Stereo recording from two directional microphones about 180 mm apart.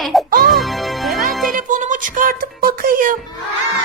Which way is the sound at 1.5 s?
45° right (ahead or behind).